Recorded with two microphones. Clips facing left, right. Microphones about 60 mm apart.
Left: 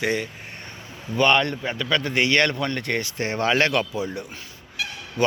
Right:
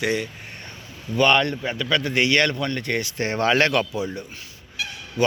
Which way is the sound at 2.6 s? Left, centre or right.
Left.